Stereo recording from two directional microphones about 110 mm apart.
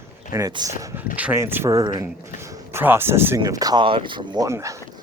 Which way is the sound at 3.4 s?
35° right (ahead or behind).